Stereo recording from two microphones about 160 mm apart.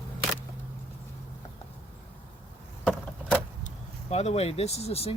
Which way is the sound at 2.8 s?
5° left (ahead or behind).